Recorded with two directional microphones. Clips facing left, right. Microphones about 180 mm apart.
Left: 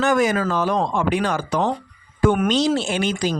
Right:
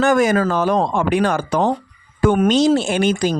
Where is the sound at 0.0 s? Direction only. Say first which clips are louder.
Right 4 dB; 50° right (ahead or behind).